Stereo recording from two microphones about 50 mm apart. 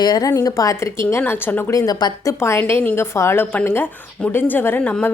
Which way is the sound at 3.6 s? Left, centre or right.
Left.